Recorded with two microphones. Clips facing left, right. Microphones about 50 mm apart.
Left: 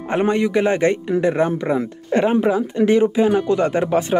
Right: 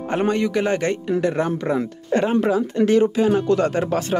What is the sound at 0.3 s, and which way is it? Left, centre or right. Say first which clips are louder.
Speech: left 3 dB; left.